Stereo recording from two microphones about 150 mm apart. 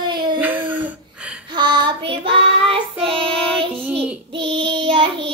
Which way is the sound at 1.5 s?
30° right (ahead or behind).